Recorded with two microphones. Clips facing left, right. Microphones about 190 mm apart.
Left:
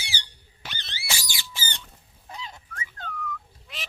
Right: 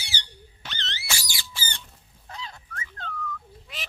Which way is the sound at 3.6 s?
Centre (ahead or behind).